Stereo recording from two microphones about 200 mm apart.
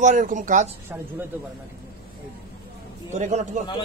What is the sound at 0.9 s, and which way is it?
Speech, 10° right (ahead or behind).